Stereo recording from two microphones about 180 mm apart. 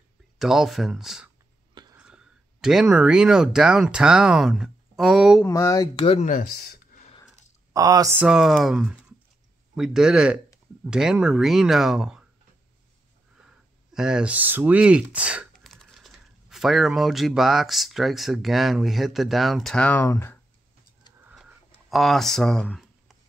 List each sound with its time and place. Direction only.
0.4 s speech: centre (ahead or behind)
5.4 s speech: 15° left (ahead or behind)
6.0 s speech: 40° left (ahead or behind)
6.4 s speech: 60° left (ahead or behind)
7.7 s speech: 20° right (ahead or behind)
8.2 s speech: 5° right (ahead or behind)
13.4 s speech: 5° right (ahead or behind); by 20.3 s 15° left (ahead or behind)
21.2 s a sound: 5° right (ahead or behind)